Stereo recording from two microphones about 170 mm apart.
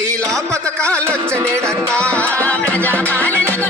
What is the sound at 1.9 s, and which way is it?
Music, 5° left (ahead or behind).